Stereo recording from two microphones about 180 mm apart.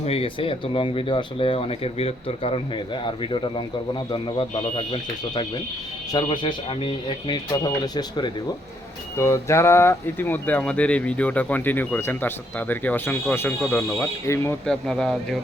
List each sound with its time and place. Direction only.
0.0 s speech: 35° left (ahead or behind); by 14.5 s 15° left (ahead or behind)
14.7 s speech: 5° left (ahead or behind)